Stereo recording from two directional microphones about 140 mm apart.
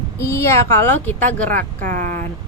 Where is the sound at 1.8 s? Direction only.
70° right (ahead or behind).